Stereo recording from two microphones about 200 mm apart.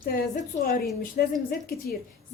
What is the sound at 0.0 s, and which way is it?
A woman's voice, 45° left (ahead or behind).